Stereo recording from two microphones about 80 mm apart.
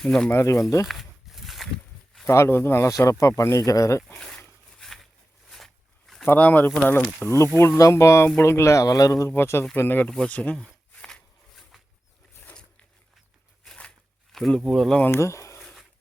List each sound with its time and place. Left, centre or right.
0.0 s speech: centre
0.3 s speech: left
0.9 s a sound: centre
2.2 s speech: left
4.1 s dog: centre
5.5 s zipper: centre
6.2 s speech: left
9.3 s speech: left
10.1 s a sound: centre
13.7 s a sound: centre
14.3 s speech: centre
15.1 s speech: left
15.6 s dog: centre